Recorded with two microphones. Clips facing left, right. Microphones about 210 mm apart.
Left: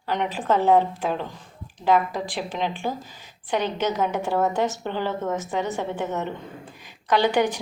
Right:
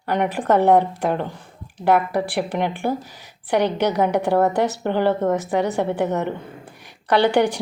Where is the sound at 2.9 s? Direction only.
10° right (ahead or behind).